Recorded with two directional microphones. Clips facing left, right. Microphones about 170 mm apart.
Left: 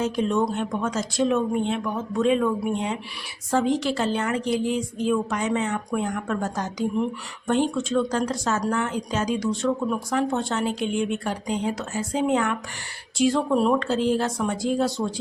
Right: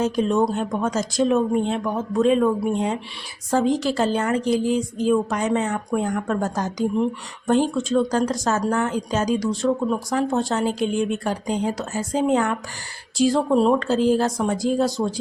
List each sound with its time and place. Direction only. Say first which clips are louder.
0.0 s speech: right 3 dB; 40° right (ahead or behind)